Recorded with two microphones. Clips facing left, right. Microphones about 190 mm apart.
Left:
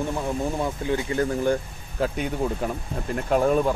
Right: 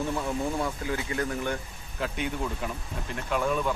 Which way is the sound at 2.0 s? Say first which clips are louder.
Left 6 dB; 40° left (ahead or behind).